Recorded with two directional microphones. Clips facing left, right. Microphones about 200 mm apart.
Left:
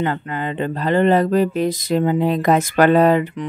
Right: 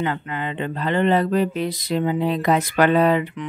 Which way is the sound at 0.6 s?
40° left (ahead or behind).